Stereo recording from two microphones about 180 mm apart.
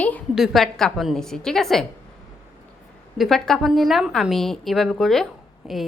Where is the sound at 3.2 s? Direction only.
Centre (ahead or behind).